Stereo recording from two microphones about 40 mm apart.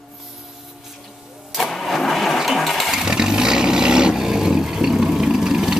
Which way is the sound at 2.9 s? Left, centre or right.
Centre.